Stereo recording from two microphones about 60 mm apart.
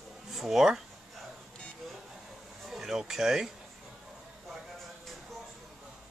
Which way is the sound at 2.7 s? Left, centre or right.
Centre.